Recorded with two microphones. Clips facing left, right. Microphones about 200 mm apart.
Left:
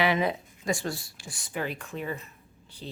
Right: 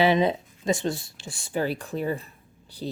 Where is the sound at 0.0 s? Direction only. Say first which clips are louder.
Right 5 dB; 25° right (ahead or behind).